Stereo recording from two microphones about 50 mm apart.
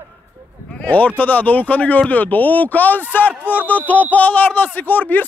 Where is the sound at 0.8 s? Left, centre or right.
Left.